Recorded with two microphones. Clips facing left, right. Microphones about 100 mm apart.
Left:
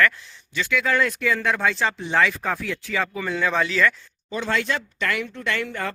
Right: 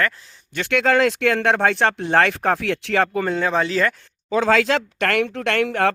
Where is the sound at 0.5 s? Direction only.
65° right (ahead or behind).